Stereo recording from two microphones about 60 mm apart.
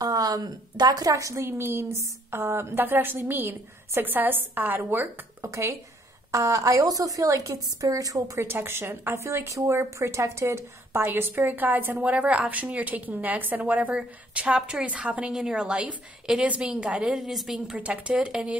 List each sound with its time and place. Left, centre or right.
0.0 s a sound: right
0.8 s a woman's voice: right
5.4 s a woman's voice: right
8.4 s a woman's voice: right; by 17.7 s centre
17.7 s a woman's voice: centre